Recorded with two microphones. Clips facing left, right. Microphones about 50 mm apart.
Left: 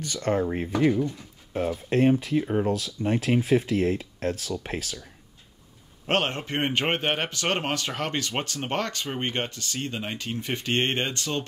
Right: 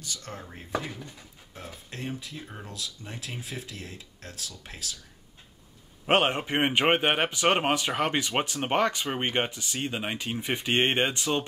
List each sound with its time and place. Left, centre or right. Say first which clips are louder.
0.0 s speech: left 14 dB; left
1.9 s speech: left 16 dB; left
6.0 s a man's voice: right 2 dB; centre